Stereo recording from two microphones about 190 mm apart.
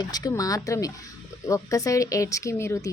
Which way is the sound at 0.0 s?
20° left (ahead or behind).